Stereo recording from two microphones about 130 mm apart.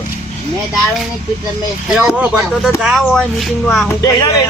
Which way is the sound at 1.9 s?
10° right (ahead or behind).